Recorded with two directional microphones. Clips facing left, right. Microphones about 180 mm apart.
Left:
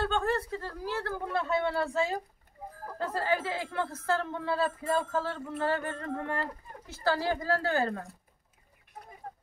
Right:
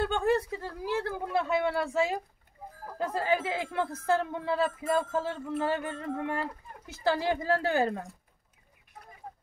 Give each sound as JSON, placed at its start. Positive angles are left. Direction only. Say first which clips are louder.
{"t": 0.0, "sound": "speech", "louder": "right 3 dB", "side_deg": -15}